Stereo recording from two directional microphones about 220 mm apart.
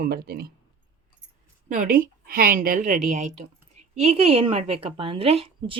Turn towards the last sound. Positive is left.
turn(degrees=-25)  # may be behind; listen again after turning